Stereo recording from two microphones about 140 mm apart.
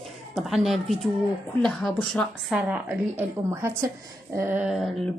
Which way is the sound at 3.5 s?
20° right (ahead or behind).